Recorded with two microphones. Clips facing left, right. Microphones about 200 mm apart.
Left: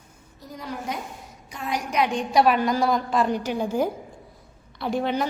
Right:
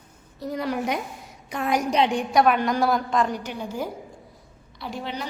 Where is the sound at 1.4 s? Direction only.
60° right (ahead or behind).